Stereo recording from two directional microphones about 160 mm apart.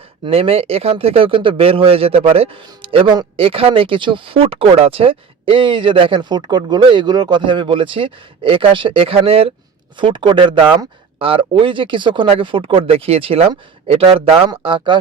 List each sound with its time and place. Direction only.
0.3 s speech: 35° right (ahead or behind)